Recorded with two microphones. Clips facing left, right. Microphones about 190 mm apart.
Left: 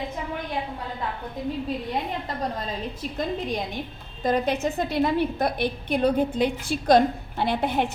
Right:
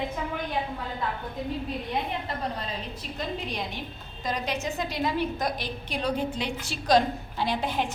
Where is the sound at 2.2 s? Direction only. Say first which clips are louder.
Left 3 dB; 45° left (ahead or behind).